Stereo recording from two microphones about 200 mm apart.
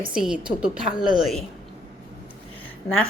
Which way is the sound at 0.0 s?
5° right (ahead or behind).